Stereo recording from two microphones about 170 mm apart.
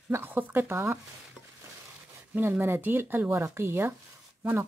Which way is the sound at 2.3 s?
10° right (ahead or behind).